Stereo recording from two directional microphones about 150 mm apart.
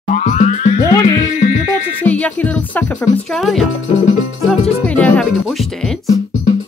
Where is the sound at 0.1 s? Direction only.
55° left (ahead or behind).